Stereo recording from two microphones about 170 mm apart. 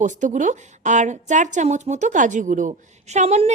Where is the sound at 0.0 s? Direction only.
45° right (ahead or behind).